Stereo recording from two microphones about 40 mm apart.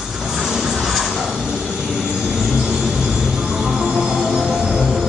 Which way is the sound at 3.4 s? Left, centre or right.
Centre.